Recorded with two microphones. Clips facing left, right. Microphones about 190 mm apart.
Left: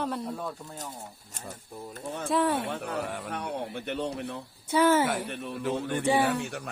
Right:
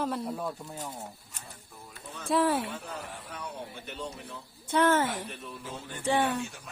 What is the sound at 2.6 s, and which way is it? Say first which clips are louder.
Speech: left 6 dB; 65° left (ahead or behind).